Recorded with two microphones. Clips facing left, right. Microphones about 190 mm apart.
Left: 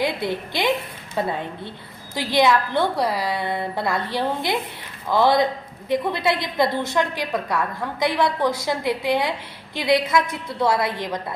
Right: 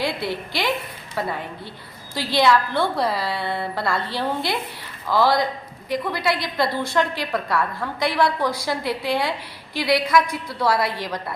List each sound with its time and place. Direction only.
0.0 s a woman's voice: 20° left (ahead or behind)